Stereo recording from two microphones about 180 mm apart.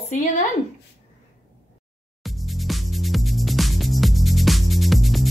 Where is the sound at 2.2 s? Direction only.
Centre (ahead or behind).